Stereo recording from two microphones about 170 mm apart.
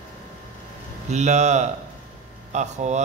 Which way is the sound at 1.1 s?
45° right (ahead or behind).